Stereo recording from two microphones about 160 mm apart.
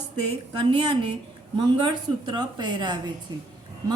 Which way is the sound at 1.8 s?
25° right (ahead or behind).